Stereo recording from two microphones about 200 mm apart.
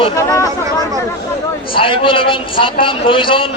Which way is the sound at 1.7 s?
25° left (ahead or behind).